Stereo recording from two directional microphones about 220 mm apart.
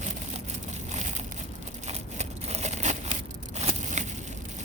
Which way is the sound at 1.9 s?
30° right (ahead or behind).